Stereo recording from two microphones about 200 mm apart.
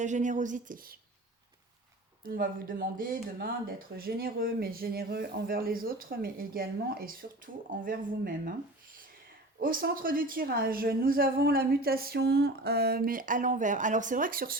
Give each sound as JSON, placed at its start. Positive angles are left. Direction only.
{"t": 0.0, "sound": "a woman's voice", "side_deg": -35}
{"t": 2.2, "sound": "speech", "side_deg": -45}
{"t": 9.6, "sound": "speech", "side_deg": -45}